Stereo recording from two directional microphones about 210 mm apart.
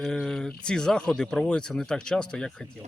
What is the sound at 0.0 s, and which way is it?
Speech, centre (ahead or behind).